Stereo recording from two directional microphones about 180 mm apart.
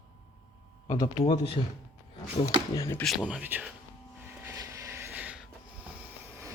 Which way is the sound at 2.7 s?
15° left (ahead or behind).